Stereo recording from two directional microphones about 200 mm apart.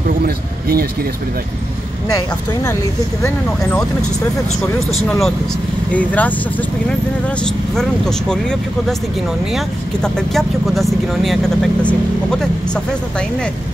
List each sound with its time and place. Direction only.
0.2 s a man's voice: 50° right (ahead or behind)
5.9 s speech: 10° left (ahead or behind)
7.7 s speech: 5° left (ahead or behind)
10.0 s speech: centre (ahead or behind)